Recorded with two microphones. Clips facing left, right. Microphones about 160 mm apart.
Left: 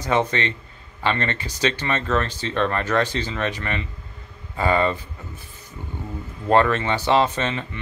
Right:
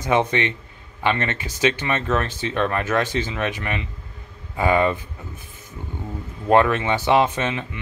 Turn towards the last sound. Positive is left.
turn(degrees=-10)  # may be behind; listen again after turning